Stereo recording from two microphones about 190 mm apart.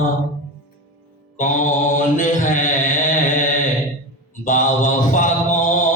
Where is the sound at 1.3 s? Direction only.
45° left (ahead or behind).